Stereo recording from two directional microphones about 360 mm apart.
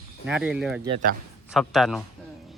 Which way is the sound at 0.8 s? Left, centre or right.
Centre.